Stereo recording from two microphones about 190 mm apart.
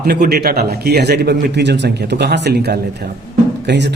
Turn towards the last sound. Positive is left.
turn(degrees=-60)  # may be behind; listen again after turning